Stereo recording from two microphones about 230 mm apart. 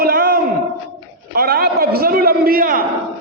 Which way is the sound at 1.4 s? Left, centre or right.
Right.